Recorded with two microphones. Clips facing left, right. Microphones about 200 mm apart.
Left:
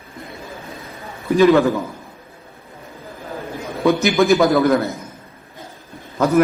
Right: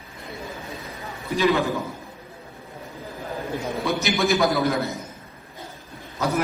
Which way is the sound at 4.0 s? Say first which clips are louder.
Left 6 dB; 50° left (ahead or behind).